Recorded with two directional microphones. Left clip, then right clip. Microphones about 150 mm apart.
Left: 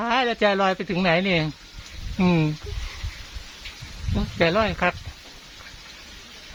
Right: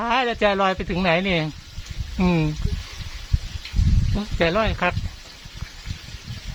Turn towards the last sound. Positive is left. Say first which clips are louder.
# even
turn(degrees=-5)  # may be behind; listen again after turning